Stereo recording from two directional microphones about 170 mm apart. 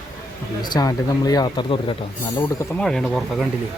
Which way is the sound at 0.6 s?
25° left (ahead or behind).